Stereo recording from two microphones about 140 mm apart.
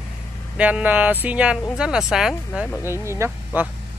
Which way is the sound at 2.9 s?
20° right (ahead or behind).